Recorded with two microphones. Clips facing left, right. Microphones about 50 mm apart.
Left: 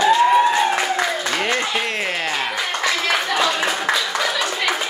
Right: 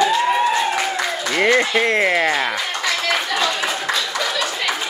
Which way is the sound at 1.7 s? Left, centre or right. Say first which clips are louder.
Right 6 dB; right.